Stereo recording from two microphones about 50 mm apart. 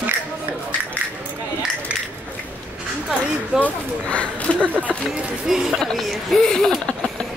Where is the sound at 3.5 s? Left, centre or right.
Left.